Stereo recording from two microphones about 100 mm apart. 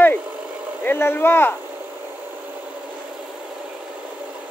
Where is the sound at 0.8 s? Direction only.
20° left (ahead or behind).